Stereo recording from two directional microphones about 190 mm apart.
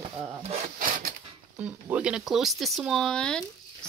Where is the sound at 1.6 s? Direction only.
10° right (ahead or behind).